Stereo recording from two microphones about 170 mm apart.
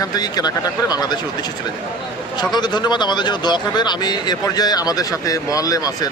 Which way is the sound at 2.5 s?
25° left (ahead or behind).